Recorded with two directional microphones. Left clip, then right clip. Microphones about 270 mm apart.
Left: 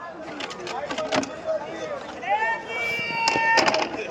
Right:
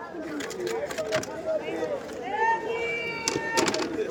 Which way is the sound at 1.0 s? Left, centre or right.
Left.